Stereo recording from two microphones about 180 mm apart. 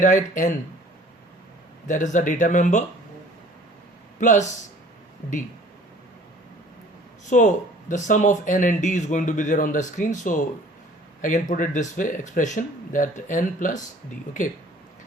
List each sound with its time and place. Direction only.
0.0 s speech: 45° left (ahead or behind)
1.9 s speech: 45° left (ahead or behind)
4.2 s speech: 45° left (ahead or behind)
7.3 s speech: 45° left (ahead or behind)